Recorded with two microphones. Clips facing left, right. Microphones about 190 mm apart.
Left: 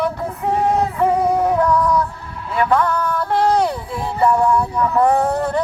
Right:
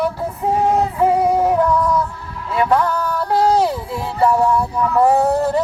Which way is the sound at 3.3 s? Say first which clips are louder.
Right 2 dB; 5° right (ahead or behind).